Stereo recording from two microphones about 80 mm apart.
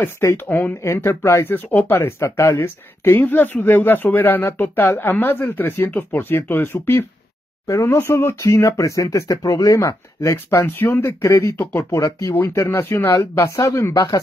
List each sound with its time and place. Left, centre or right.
0.0 s speech: left
7.6 s speech: left
13.9 s speech: left